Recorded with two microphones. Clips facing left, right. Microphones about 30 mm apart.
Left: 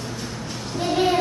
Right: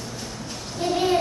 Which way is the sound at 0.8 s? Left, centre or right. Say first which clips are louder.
Left 1 dB; centre.